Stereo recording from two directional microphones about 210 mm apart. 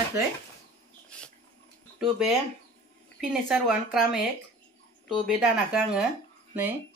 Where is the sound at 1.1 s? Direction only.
5° left (ahead or behind).